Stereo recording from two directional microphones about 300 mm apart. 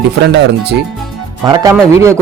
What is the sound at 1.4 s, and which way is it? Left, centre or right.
Speech, centre.